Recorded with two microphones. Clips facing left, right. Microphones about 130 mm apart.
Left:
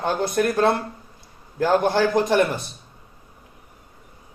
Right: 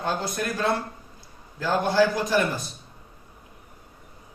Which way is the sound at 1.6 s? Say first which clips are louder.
Left 3 dB; 55° left (ahead or behind).